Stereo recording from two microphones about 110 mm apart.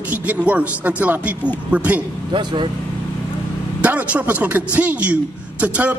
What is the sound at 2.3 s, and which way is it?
Speech, 45° right (ahead or behind).